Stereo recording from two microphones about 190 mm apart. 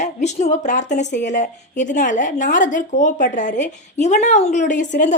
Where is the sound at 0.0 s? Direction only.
35° left (ahead or behind).